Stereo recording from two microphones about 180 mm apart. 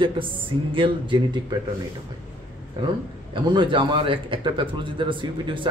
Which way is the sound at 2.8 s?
25° right (ahead or behind).